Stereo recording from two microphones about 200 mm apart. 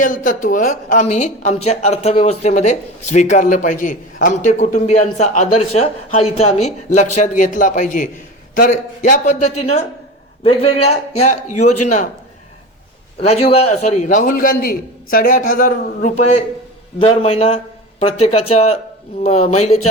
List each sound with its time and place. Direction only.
0.0 s speech: 45° left (ahead or behind)
13.4 s speech: 30° left (ahead or behind)
17.0 s speech: 30° left (ahead or behind)